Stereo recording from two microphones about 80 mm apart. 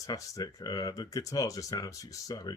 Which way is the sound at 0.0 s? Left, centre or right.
Left.